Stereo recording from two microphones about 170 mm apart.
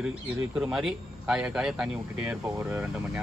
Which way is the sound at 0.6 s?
5° right (ahead or behind).